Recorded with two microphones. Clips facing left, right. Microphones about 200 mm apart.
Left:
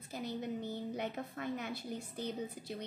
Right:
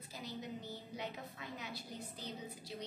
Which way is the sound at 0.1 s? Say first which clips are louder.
Left 7 dB; 55° left (ahead or behind).